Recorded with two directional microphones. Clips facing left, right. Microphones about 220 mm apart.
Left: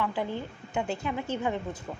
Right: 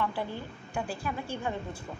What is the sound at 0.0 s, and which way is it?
A woman's voice, 15° left (ahead or behind).